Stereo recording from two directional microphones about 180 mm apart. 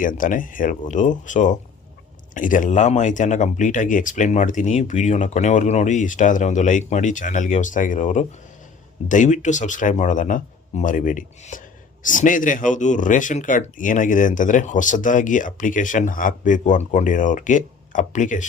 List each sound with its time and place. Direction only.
0.0 s speech: 50° left (ahead or behind)